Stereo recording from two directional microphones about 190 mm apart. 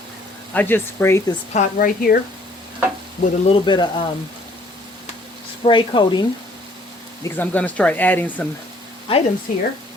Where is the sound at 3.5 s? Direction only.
25° left (ahead or behind).